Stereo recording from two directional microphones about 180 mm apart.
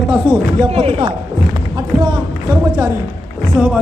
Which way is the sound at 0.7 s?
35° right (ahead or behind).